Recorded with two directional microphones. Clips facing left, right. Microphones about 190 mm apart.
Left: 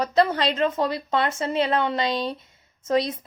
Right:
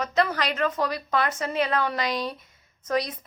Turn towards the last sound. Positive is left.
turn(degrees=25)  # may be behind; listen again after turning